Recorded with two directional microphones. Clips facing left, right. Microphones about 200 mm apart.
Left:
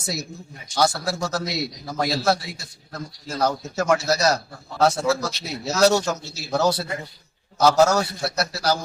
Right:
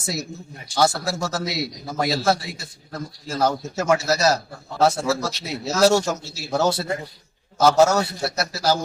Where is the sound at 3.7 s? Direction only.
5° right (ahead or behind).